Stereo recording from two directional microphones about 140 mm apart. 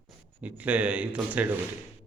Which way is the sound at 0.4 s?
10° right (ahead or behind).